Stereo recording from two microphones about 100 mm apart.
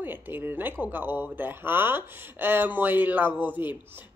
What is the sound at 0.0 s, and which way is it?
Speech, 20° right (ahead or behind).